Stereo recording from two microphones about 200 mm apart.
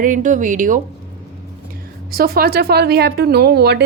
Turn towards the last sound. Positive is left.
turn(degrees=-55)  # may be behind; listen again after turning